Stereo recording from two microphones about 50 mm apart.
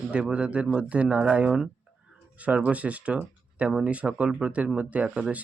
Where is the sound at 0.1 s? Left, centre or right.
Right.